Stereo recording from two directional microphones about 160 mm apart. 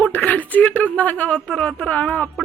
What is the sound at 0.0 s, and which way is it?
Speech, 10° left (ahead or behind).